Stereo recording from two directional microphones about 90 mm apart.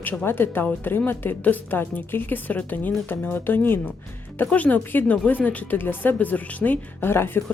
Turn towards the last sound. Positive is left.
turn(degrees=25)  # may be behind; listen again after turning